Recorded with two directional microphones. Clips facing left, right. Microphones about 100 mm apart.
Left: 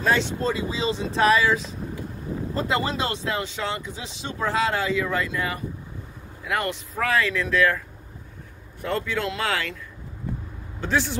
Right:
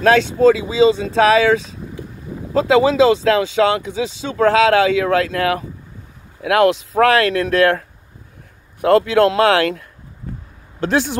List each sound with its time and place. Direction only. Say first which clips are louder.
0.0 s speech: right 11 dB; 90° right; by 7.8 s 70° right (ahead or behind)
8.8 s speech: right 14 dB; 75° right (ahead or behind)